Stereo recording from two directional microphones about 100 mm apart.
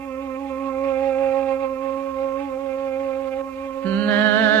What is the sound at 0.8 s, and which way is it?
Music, 20° left (ahead or behind).